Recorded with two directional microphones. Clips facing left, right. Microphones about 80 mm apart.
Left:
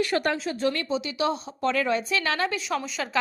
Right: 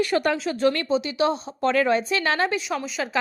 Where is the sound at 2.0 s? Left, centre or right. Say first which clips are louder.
Right 3 dB; right.